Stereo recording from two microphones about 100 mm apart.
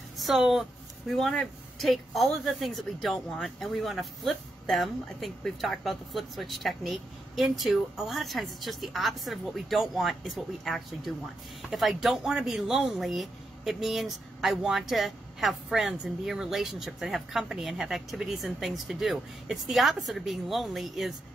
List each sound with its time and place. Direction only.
0.2 s a woman's voice: centre (ahead or behind)